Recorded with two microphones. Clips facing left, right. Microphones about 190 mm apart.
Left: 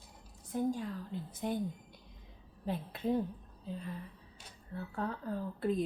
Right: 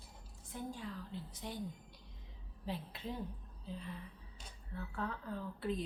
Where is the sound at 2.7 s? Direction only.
50° left (ahead or behind).